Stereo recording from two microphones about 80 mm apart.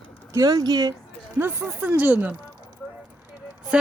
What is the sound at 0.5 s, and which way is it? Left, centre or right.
Speech, right.